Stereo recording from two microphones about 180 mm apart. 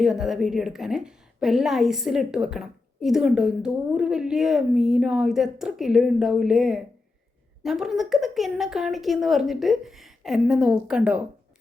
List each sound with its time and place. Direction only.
0.0 s a woman's voice: centre (ahead or behind)